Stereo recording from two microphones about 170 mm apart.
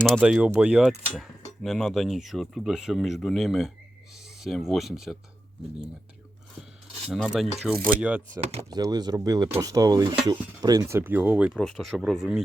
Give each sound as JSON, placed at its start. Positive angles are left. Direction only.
{"t": 0.2, "sound": "speech", "side_deg": -5}
{"t": 7.1, "sound": "speech", "side_deg": 0}
{"t": 8.4, "sound": "speech", "side_deg": -40}
{"t": 8.7, "sound": "speech", "side_deg": -25}